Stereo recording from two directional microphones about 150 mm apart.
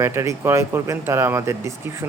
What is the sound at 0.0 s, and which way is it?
Speech, 20° right (ahead or behind).